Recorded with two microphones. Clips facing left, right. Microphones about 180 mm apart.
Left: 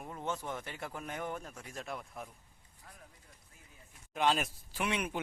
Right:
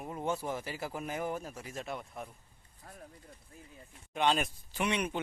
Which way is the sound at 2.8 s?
40° right (ahead or behind).